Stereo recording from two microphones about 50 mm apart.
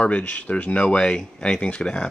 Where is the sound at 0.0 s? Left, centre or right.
Left.